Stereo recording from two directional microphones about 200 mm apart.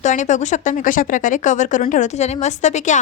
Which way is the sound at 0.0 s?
40° left (ahead or behind).